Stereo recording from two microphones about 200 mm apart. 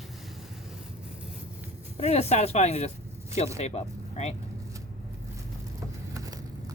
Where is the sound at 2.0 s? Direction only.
30° left (ahead or behind).